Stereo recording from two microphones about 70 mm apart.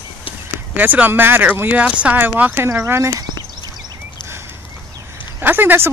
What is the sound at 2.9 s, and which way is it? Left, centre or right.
Speech, right.